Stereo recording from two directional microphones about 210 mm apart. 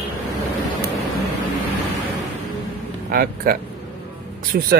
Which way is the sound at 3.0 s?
45° right (ahead or behind).